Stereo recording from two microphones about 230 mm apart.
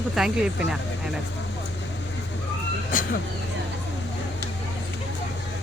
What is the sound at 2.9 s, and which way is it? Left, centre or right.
Speech, left.